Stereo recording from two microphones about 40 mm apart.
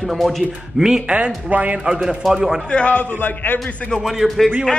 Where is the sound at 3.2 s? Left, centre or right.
Left.